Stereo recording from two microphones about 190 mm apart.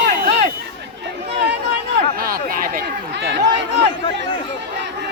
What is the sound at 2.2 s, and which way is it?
Speech, 50° right (ahead or behind).